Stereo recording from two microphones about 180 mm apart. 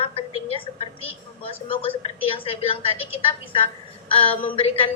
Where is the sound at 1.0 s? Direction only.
30° left (ahead or behind).